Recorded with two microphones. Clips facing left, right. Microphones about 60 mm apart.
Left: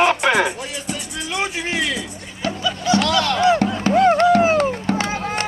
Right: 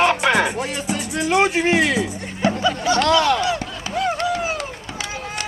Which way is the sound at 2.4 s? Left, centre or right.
Right.